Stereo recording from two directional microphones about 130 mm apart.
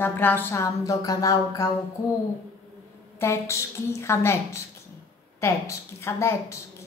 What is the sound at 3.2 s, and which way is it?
A woman's voice, 20° left (ahead or behind).